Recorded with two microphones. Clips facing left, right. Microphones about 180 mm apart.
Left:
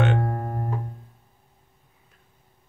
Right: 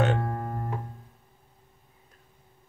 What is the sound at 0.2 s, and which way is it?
Music, 35° left (ahead or behind).